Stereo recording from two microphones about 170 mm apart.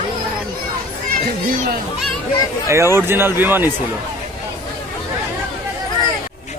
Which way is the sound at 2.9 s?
15° right (ahead or behind).